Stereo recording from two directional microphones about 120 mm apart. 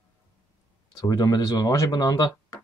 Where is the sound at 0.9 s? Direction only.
35° left (ahead or behind).